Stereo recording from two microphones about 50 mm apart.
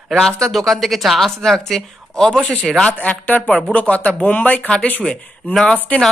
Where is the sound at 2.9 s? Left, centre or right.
Left.